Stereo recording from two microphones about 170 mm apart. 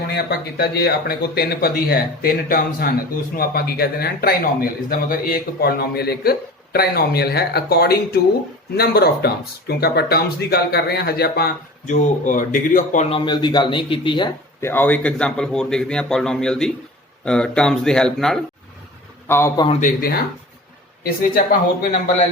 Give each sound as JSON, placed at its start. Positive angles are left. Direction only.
{"t": 0.1, "sound": "speech", "side_deg": 65}
{"t": 11.9, "sound": "speech", "side_deg": 50}
{"t": 13.1, "sound": "speech", "side_deg": 30}
{"t": 14.6, "sound": "a man's voice", "side_deg": 10}
{"t": 19.3, "sound": "a man's voice", "side_deg": 15}
{"t": 19.8, "sound": "speech", "side_deg": 60}